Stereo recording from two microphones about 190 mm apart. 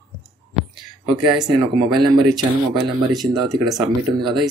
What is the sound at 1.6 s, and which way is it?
Speech, 25° right (ahead or behind).